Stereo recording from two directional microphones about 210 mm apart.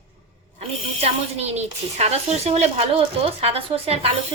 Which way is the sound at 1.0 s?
30° right (ahead or behind).